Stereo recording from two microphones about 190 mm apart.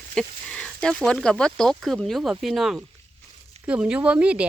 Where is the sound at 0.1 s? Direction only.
5° left (ahead or behind).